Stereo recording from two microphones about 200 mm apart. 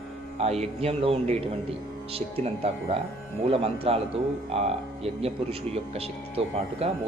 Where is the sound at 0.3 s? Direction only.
30° right (ahead or behind).